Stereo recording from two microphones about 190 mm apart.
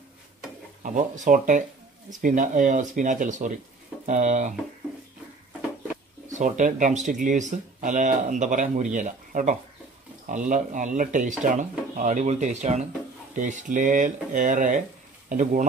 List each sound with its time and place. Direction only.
0.8 s speech: 40° right (ahead or behind)
6.3 s speech: 40° right (ahead or behind)